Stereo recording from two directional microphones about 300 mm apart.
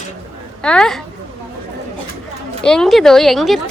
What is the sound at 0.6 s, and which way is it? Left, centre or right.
Speech, centre.